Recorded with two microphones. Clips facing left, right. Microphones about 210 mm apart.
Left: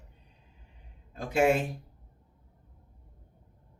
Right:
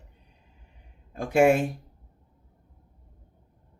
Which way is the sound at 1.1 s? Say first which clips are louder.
Right 6 dB; 55° right (ahead or behind).